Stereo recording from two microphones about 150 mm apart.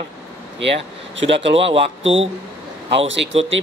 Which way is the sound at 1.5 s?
40° right (ahead or behind).